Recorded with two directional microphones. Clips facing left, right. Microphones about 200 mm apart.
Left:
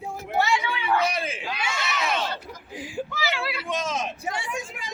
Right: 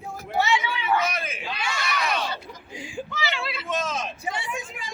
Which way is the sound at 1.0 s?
30° left (ahead or behind).